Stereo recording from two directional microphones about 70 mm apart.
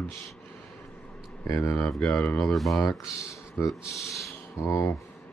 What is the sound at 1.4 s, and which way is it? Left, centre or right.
Speech, left.